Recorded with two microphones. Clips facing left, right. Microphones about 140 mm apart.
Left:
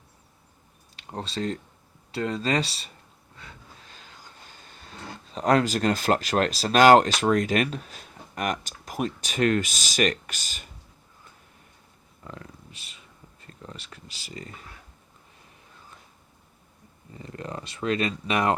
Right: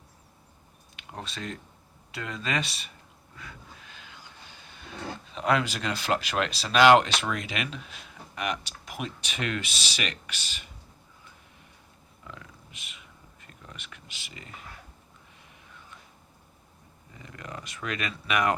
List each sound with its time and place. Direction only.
0.9 s speech: 35° left (ahead or behind)
3.3 s train: 30° left (ahead or behind)
5.3 s speech: 40° left (ahead or behind)
12.2 s speech: 40° left (ahead or behind)
17.1 s speech: 35° left (ahead or behind)